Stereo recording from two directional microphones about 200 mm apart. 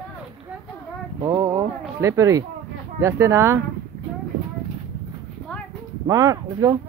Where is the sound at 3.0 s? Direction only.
15° right (ahead or behind).